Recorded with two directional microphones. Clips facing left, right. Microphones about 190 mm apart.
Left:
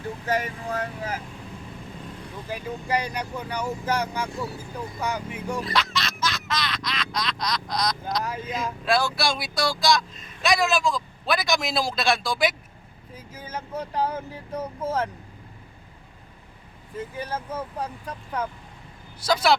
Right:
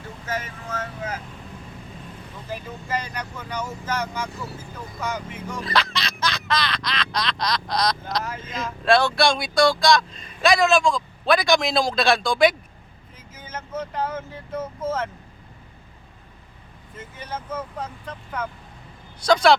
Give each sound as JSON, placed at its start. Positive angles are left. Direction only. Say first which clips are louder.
{"t": 0.3, "sound": "speech", "louder": "left 4 dB", "side_deg": 15}
{"t": 2.5, "sound": "speech", "louder": "left 2 dB", "side_deg": 15}
{"t": 5.6, "sound": "a sound", "louder": "right 2 dB", "side_deg": 0}
{"t": 8.2, "sound": "speech", "louder": "left 2 dB", "side_deg": 15}
{"t": 13.5, "sound": "vehicle", "louder": "right 1 dB", "side_deg": 15}
{"t": 14.1, "sound": "speech", "louder": "right 1 dB", "side_deg": 35}
{"t": 14.6, "sound": "speech", "louder": "right 2 dB", "side_deg": 15}
{"t": 19.2, "sound": "speech", "louder": "right 5 dB", "side_deg": 5}